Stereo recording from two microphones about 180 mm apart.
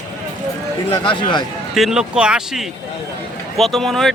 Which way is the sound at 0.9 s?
25° left (ahead or behind).